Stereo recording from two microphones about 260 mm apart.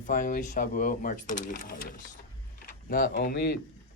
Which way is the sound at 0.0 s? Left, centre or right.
Left.